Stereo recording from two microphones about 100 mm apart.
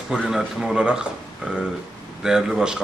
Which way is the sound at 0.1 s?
5° right (ahead or behind).